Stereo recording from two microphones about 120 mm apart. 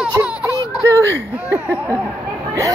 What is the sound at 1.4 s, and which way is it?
Speech, 10° right (ahead or behind).